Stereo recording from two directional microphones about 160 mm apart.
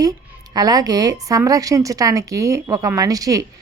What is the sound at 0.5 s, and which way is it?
A woman's voice, 25° right (ahead or behind).